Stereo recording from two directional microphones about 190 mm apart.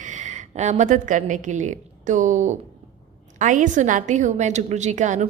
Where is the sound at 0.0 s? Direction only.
40° right (ahead or behind).